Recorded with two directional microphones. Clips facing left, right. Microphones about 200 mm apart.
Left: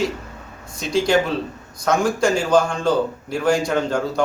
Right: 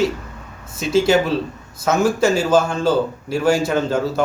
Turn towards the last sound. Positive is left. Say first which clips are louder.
# right 2 dB
turn(degrees=-5)  # may be behind; listen again after turning